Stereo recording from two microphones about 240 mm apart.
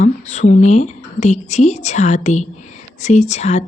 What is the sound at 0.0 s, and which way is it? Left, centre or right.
A woman's voice, left.